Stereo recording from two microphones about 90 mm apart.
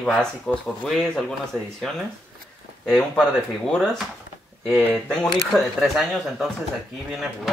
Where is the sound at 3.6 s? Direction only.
5° left (ahead or behind).